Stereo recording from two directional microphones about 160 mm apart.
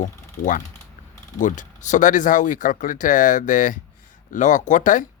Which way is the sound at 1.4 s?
50° left (ahead or behind).